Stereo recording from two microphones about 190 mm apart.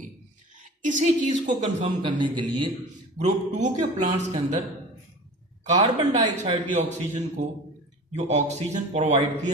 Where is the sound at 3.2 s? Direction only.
40° right (ahead or behind).